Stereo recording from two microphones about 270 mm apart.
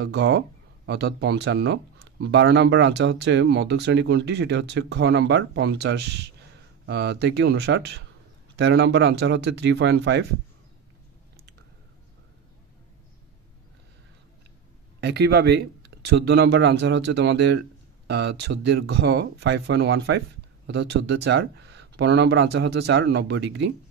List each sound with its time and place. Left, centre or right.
0.0 s speech: right
15.0 s speech: right